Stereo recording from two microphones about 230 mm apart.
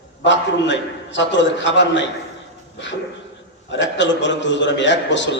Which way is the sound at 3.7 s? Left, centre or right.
Left.